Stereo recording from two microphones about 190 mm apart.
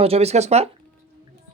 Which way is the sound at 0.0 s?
35° right (ahead or behind).